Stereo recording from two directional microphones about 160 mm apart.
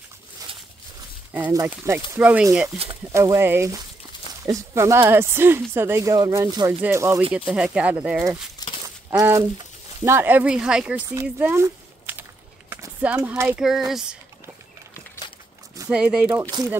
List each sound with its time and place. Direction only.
1.5 s speech: 20° right (ahead or behind)
2.1 s speech: 10° right (ahead or behind)
8.8 s a sound: 20° right (ahead or behind)
10.0 s speech: 15° right (ahead or behind)
11.1 s a sound: 15° right (ahead or behind)
13.6 s speech: centre (ahead or behind)
15.9 s speech: 5° right (ahead or behind)
16.5 s speech: 30° right (ahead or behind)